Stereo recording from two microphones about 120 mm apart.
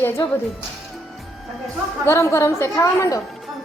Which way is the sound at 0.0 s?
20° left (ahead or behind).